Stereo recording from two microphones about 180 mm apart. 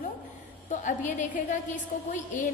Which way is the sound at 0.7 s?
45° left (ahead or behind).